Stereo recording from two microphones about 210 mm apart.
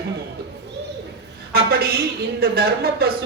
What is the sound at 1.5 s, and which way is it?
A woman's voice, 50° right (ahead or behind).